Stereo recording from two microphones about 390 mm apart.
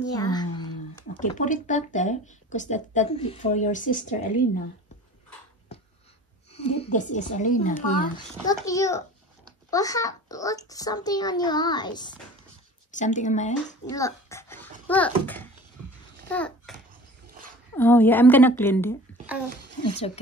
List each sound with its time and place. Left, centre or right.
0.1 s speech: centre
5.7 s a sound: centre
6.5 s speech: centre
8.6 s a child's voice: centre
13.9 s dog: centre
16.3 s babbling: centre
17.3 s dog: right
17.7 s a woman's voice: centre